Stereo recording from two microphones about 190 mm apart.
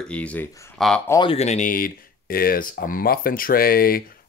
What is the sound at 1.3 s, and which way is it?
Speech, 35° left (ahead or behind).